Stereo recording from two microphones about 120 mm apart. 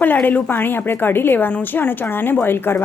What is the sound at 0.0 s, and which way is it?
A woman's voice, 15° left (ahead or behind).